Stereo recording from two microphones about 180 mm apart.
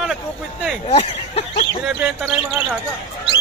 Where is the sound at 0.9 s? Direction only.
35° left (ahead or behind).